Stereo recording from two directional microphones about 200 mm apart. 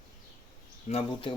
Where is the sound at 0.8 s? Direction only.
30° left (ahead or behind).